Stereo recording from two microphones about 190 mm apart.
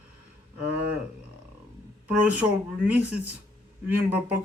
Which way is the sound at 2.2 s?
5° right (ahead or behind).